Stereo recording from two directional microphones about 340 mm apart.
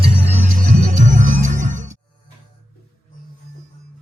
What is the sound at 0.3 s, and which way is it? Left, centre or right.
Music, right.